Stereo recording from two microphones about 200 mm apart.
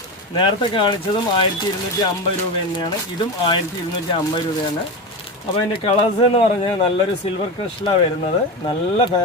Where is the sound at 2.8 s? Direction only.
20° left (ahead or behind).